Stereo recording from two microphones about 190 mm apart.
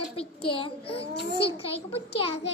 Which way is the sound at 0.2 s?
30° left (ahead or behind).